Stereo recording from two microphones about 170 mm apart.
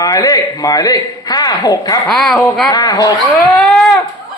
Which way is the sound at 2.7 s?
20° left (ahead or behind).